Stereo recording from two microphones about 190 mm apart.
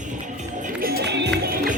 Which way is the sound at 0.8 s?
55° right (ahead or behind).